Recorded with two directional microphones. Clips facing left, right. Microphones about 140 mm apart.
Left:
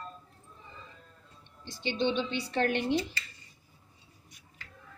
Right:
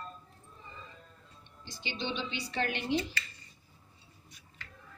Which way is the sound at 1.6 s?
55° left (ahead or behind).